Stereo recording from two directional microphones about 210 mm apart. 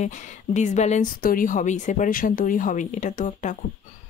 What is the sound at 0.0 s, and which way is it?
Speech, 35° left (ahead or behind).